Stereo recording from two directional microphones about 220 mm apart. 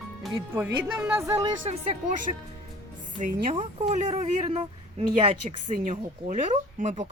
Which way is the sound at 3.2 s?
40° right (ahead or behind).